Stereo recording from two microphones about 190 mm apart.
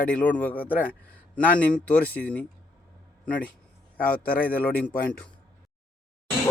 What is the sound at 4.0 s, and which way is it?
Speech, 50° left (ahead or behind).